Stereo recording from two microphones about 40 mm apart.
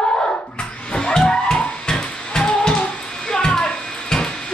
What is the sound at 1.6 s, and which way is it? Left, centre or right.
Music, left.